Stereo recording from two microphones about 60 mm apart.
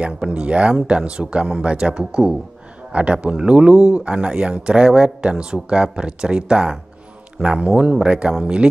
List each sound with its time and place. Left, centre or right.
0.0 s speech: centre